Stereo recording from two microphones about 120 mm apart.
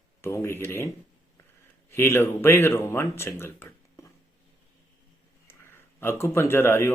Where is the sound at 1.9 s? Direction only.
20° left (ahead or behind).